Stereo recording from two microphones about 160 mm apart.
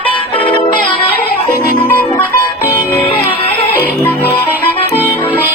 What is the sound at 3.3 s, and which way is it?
Music, 35° left (ahead or behind).